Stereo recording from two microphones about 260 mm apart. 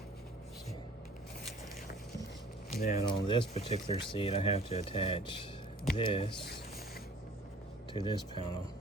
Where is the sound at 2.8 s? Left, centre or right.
Left.